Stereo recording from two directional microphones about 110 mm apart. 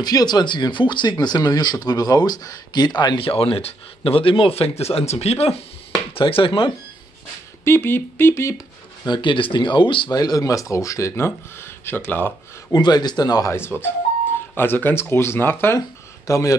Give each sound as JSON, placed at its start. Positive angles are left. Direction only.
{"t": 0.0, "sound": "speech", "side_deg": 40}
{"t": 3.2, "sound": "speech", "side_deg": 55}
{"t": 4.9, "sound": "speech", "side_deg": 75}
{"t": 6.1, "sound": "speech", "side_deg": 55}
{"t": 7.6, "sound": "speech", "side_deg": 20}
{"t": 9.1, "sound": "speech", "side_deg": 50}
{"t": 10.1, "sound": "speech", "side_deg": 35}
{"t": 12.7, "sound": "a man's voice", "side_deg": 40}